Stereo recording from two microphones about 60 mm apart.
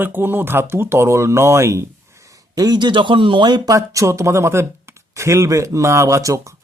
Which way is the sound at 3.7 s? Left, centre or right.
Right.